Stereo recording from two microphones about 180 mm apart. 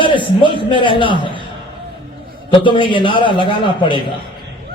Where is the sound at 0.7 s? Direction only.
25° left (ahead or behind).